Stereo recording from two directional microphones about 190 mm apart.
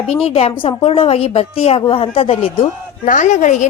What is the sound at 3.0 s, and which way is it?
Speech, 40° left (ahead or behind).